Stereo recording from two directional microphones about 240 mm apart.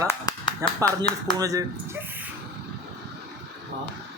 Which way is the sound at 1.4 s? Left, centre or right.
Centre.